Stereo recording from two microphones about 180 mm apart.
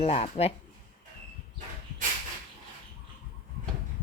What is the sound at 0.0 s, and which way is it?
Speech, 35° left (ahead or behind).